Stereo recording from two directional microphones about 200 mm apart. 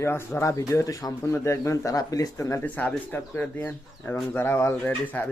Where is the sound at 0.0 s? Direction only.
10° left (ahead or behind).